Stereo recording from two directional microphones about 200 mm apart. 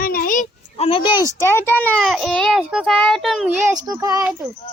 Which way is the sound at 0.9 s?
25° left (ahead or behind).